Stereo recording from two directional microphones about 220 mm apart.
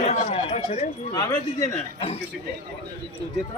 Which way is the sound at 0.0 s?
25° left (ahead or behind).